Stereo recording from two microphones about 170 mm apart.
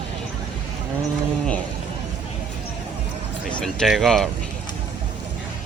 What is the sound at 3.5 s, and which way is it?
Speech, 5° left (ahead or behind).